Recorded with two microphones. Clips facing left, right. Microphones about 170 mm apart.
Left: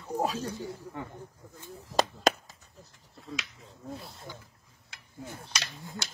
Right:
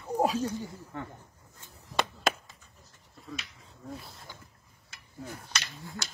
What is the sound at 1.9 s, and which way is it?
Chop, 40° left (ahead or behind).